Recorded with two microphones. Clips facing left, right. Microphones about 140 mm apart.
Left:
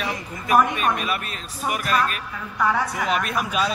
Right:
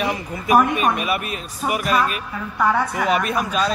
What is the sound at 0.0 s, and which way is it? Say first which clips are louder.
Speech: right 5 dB; 10° right (ahead or behind).